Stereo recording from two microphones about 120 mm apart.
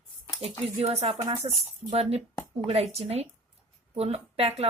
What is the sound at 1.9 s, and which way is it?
A woman's voice, 60° right (ahead or behind).